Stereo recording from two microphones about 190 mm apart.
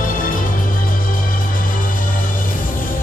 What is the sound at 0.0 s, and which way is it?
Music, 45° left (ahead or behind).